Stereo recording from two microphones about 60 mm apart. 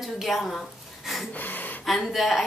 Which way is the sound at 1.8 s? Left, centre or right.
Centre.